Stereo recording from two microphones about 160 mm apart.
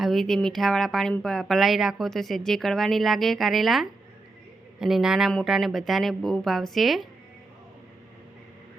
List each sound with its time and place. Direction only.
0.0 s speech: centre (ahead or behind)